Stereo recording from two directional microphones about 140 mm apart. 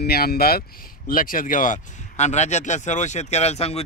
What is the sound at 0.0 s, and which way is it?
Speech, 90° left.